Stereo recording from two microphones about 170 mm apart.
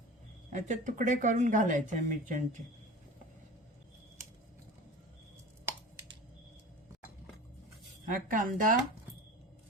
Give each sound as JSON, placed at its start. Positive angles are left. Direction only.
{"t": 0.5, "sound": "speech", "side_deg": -45}
{"t": 8.0, "sound": "speech", "side_deg": -55}